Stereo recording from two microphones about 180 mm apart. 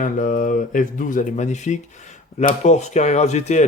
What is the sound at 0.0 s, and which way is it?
Speech, 45° left (ahead or behind).